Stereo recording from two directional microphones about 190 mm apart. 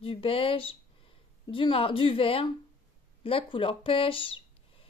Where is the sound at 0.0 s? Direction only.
30° left (ahead or behind).